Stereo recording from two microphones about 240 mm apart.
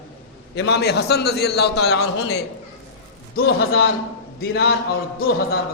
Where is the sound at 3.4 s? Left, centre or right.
Left.